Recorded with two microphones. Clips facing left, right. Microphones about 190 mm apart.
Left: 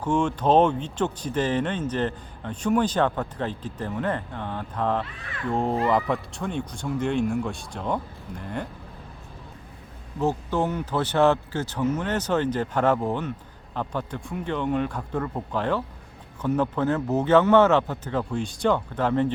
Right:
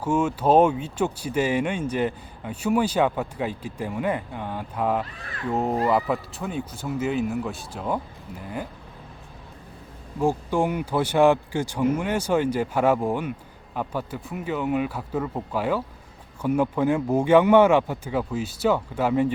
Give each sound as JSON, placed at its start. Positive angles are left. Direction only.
{"t": 0.0, "sound": "speech", "side_deg": -5}
{"t": 5.0, "sound": "speech", "side_deg": -40}
{"t": 5.5, "sound": "speech", "side_deg": -5}
{"t": 10.2, "sound": "speech", "side_deg": -10}